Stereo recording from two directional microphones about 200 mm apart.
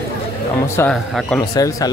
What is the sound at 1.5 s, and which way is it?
Speech, 20° left (ahead or behind).